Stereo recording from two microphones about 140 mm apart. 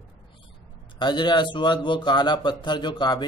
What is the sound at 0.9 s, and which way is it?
A man's voice, 30° left (ahead or behind).